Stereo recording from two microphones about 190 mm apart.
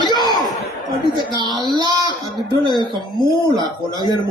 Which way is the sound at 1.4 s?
20° right (ahead or behind).